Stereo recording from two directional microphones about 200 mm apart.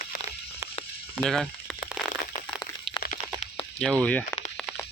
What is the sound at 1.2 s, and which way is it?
Speech, centre (ahead or behind).